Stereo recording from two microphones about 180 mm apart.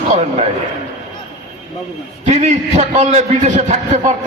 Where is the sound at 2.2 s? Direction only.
40° right (ahead or behind).